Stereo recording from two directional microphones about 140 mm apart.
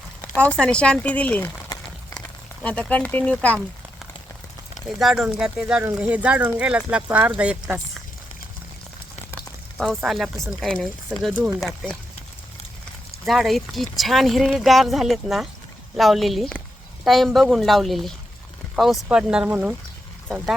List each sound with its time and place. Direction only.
0.4 s speech: 5° left (ahead or behind)
1.7 s crumpling: 25° left (ahead or behind)
2.6 s speech: 10° left (ahead or behind)
4.9 s speech: centre (ahead or behind)
9.7 s speech: centre (ahead or behind)
13.2 s speech: centre (ahead or behind)